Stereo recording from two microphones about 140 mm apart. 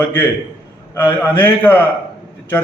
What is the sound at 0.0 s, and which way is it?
A man's voice, 15° left (ahead or behind).